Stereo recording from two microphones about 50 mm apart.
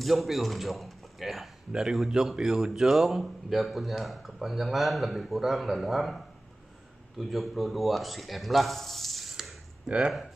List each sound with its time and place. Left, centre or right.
0.0 s speech: centre
1.7 s a man's voice: centre
9.8 s speech: right